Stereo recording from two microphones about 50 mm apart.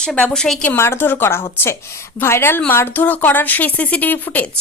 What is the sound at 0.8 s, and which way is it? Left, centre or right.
A woman's voice, left.